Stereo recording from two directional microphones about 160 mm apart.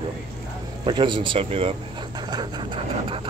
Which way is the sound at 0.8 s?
30° right (ahead or behind).